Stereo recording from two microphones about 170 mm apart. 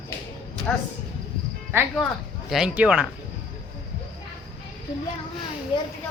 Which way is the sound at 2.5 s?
5° right (ahead or behind).